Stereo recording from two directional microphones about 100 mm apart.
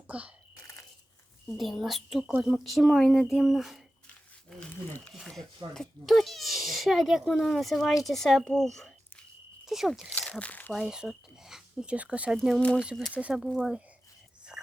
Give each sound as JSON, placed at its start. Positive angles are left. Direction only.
{"t": 0.1, "sound": "a sound", "side_deg": -10}
{"t": 1.5, "sound": "speech", "side_deg": 0}
{"t": 4.9, "sound": "speech", "side_deg": 15}
{"t": 5.1, "sound": "speech", "side_deg": 5}
{"t": 10.7, "sound": "speech", "side_deg": -5}
{"t": 12.4, "sound": "speech", "side_deg": 0}
{"t": 14.5, "sound": "dog", "side_deg": 0}